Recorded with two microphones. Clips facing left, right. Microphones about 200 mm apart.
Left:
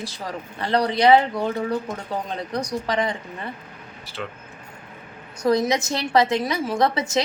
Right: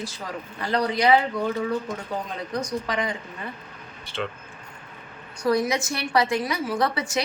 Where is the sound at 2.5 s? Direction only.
35° left (ahead or behind).